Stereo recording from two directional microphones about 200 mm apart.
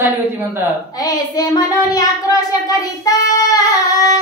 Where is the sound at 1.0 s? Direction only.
20° left (ahead or behind).